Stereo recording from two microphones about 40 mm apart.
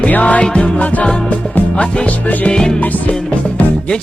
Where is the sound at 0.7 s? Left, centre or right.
Left.